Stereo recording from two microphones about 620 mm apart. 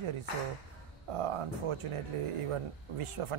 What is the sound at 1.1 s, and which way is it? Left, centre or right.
Speech, right.